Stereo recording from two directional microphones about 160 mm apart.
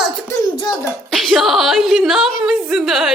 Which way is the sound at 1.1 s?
Centre (ahead or behind).